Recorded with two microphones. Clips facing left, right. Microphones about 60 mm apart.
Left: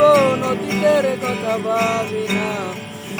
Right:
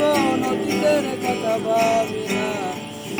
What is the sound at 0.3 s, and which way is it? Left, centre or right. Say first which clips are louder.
Music: left 1 dB; left.